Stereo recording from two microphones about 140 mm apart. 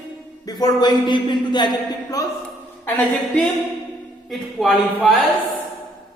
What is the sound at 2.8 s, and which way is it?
A woman's voice, 10° left (ahead or behind).